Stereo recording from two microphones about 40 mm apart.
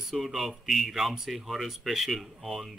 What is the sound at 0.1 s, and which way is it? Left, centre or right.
Speech, centre.